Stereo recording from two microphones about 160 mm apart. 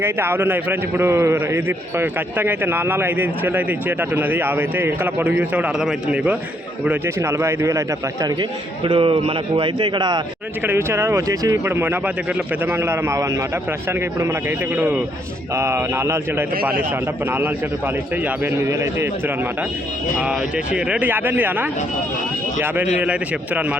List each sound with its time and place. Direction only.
0.0 s a man's voice: 15° right (ahead or behind)
10.6 s a man's voice: 15° right (ahead or behind)
14.8 s a man's voice: 15° right (ahead or behind)
20.1 s a man's voice: 5° right (ahead or behind)